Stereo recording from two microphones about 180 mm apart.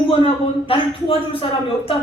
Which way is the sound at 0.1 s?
30° left (ahead or behind).